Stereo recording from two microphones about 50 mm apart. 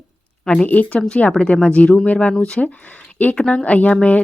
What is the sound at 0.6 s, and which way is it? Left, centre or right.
Speech, left.